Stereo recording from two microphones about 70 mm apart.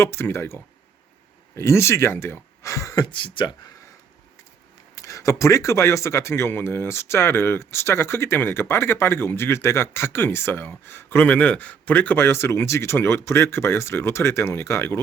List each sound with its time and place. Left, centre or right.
0.0 s speech: left
4.9 s speech: left
11.3 s speech: centre; by 14.8 s left